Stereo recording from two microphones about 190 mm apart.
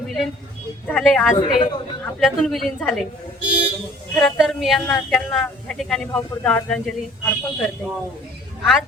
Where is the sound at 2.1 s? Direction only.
Centre (ahead or behind).